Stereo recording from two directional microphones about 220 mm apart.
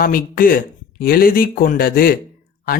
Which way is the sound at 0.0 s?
40° left (ahead or behind).